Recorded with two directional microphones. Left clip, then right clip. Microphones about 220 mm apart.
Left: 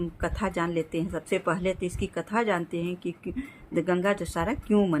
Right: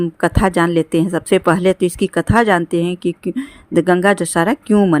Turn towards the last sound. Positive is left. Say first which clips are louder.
# right 11 dB
turn(degrees=-35)  # may be behind; listen again after turning